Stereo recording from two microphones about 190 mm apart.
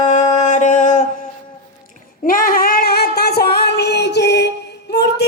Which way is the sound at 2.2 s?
50° left (ahead or behind).